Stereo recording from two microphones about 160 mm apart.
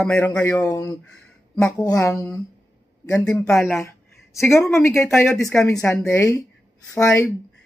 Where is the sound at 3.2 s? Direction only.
5° left (ahead or behind).